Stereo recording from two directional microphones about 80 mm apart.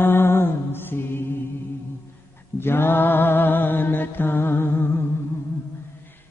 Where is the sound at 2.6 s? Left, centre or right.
Left.